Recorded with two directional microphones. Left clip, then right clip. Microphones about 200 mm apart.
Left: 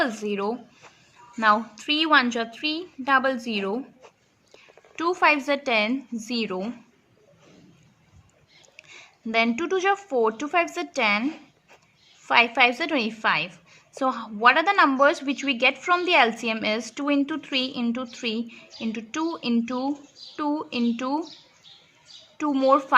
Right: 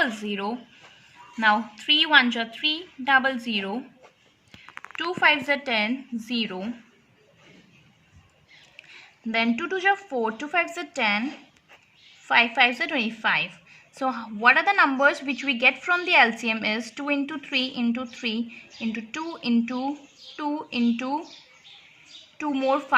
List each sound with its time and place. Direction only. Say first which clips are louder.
0.0 s a woman's voice: left 1 dB; 25° left (ahead or behind)
4.9 s a woman's voice: left 1 dB; 25° left (ahead or behind)
8.9 s a woman's voice: left 1 dB; 20° left (ahead or behind)
22.4 s a woman's voice: left 4 dB; 15° left (ahead or behind)